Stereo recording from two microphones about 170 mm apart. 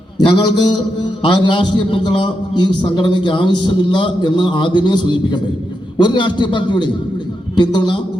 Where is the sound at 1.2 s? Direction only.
25° left (ahead or behind).